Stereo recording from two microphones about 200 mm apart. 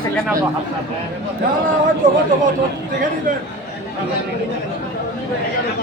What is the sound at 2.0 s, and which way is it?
Speech, 45° right (ahead or behind).